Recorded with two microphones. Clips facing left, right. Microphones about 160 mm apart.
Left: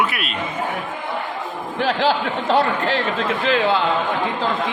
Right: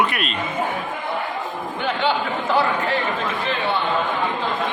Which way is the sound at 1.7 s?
90° left.